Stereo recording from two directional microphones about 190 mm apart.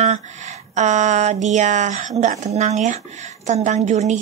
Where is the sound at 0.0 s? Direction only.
35° right (ahead or behind).